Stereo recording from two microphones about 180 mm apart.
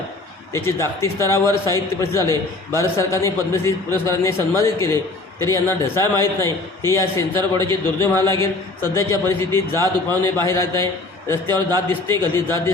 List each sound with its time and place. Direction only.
0.5 s a man's voice: 15° left (ahead or behind)